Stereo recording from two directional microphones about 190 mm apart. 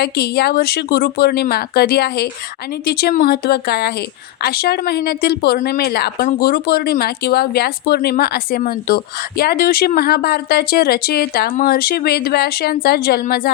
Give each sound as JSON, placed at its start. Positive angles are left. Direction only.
{"t": 0.0, "sound": "speech", "side_deg": 60}